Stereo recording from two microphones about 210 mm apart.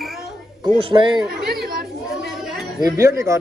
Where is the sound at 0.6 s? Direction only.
20° right (ahead or behind).